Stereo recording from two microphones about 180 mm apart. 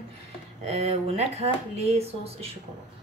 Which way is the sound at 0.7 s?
35° right (ahead or behind).